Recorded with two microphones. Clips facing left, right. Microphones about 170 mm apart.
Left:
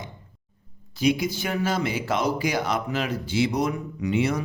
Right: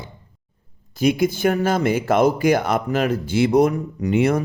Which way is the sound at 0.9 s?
50° right (ahead or behind).